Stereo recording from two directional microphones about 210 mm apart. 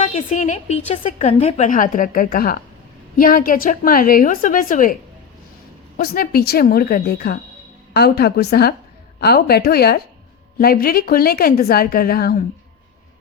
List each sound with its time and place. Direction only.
0.0 s a woman's voice: 35° left (ahead or behind)
6.0 s a woman's voice: 45° left (ahead or behind)